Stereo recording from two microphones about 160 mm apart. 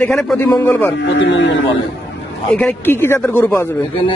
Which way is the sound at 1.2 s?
90° left.